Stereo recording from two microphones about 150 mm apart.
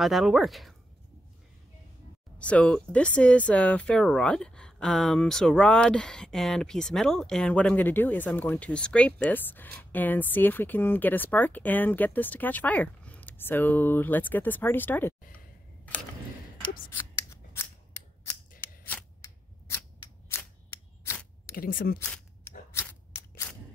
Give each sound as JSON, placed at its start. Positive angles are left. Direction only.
{"t": 0.0, "sound": "speech", "side_deg": 0}
{"t": 2.3, "sound": "speech", "side_deg": 10}
{"t": 17.3, "sound": "scissors", "side_deg": 20}
{"t": 21.5, "sound": "speech", "side_deg": 75}
{"t": 22.7, "sound": "a sound", "side_deg": 15}